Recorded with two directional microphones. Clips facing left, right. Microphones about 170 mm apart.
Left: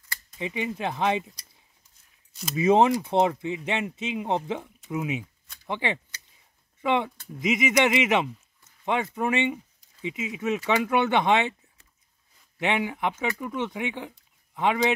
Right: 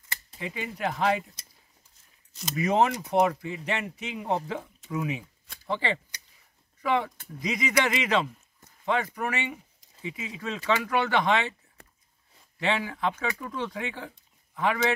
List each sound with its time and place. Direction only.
0.4 s speech: 20° left (ahead or behind)
2.5 s speech: 25° left (ahead or behind)
12.5 s speech: 20° left (ahead or behind)